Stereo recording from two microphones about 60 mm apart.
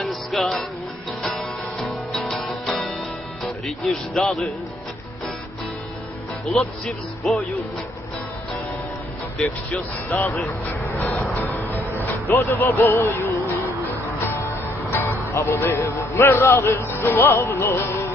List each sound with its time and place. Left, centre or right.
0.0 s music: centre
3.4 s speech: centre
6.4 s speech: centre
10.1 s speech: left
11.3 s music: left
15.1 s a man's voice: left